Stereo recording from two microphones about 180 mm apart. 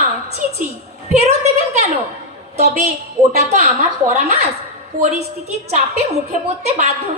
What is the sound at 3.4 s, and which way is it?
Speech, 40° right (ahead or behind).